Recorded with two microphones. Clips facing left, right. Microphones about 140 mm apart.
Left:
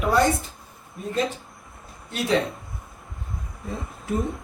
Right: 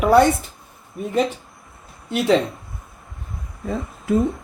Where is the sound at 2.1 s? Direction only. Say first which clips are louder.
Right 8 dB; 65° right (ahead or behind).